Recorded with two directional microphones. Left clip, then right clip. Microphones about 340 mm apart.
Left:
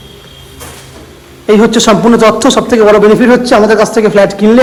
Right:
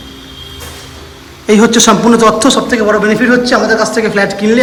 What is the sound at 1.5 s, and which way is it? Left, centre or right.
A man's voice, centre.